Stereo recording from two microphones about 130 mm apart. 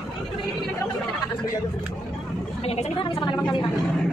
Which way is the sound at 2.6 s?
50° left (ahead or behind).